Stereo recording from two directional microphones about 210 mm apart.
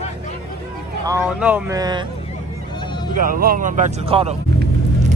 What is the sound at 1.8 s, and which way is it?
Speech, 20° right (ahead or behind).